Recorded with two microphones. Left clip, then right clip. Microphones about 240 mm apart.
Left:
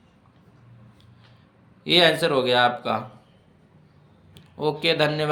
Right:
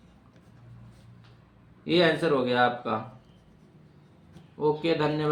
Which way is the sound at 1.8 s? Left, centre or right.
Left.